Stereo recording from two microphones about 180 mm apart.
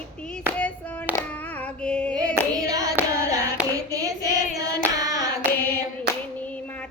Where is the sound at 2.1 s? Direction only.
20° right (ahead or behind).